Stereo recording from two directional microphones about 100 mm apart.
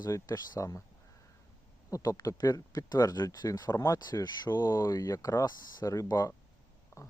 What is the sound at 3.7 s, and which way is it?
Speech, 30° left (ahead or behind).